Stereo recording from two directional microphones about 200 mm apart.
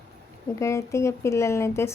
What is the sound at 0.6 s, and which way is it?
Speech, 15° left (ahead or behind).